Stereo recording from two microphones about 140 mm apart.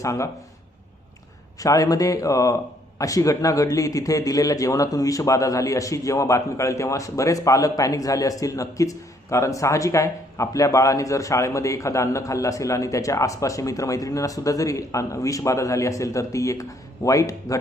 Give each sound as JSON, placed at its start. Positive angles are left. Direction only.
{"t": 0.0, "sound": "a man's voice", "side_deg": 20}
{"t": 1.5, "sound": "a man's voice", "side_deg": 25}